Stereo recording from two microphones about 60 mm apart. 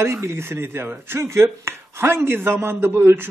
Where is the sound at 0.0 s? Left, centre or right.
Right.